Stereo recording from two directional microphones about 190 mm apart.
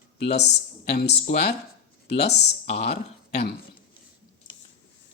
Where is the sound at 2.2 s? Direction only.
35° left (ahead or behind).